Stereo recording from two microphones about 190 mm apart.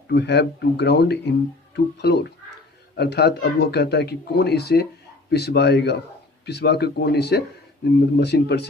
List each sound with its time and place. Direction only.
0.1 s speech: 65° left (ahead or behind)